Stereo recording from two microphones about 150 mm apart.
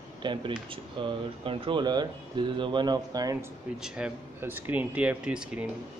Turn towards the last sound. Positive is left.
turn(degrees=-5)  # may be behind; listen again after turning